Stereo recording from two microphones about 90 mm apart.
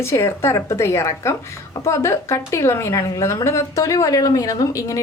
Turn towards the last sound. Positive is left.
turn(degrees=35)  # may be behind; listen again after turning